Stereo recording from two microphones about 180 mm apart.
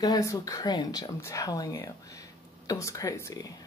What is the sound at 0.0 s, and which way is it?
Speech, 20° left (ahead or behind).